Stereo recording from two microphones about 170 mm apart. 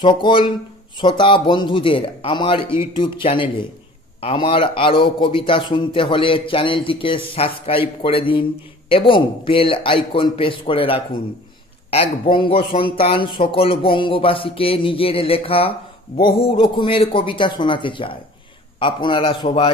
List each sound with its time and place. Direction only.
0.0 s a man's voice: 25° left (ahead or behind)